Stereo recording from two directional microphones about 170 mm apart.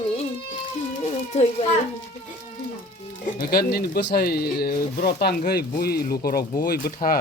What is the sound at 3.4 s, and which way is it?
Speech, 65° left (ahead or behind).